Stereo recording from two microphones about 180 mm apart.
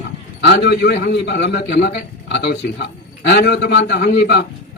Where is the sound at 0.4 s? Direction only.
70° left (ahead or behind).